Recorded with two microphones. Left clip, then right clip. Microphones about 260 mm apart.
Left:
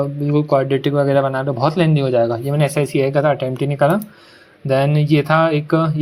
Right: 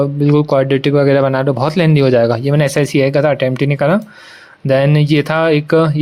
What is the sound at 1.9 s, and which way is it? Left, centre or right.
Speech, right.